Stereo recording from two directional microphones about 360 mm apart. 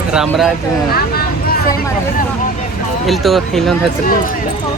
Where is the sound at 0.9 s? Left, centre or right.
Left.